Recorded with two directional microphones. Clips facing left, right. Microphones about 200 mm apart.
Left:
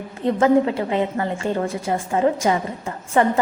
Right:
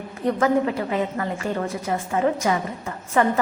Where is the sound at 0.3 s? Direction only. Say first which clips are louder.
Left 4 dB; 25° left (ahead or behind).